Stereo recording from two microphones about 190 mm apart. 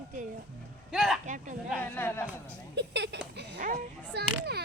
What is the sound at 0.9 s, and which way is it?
Speech, centre (ahead or behind).